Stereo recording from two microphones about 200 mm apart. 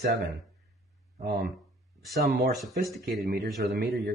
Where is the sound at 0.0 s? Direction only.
55° right (ahead or behind).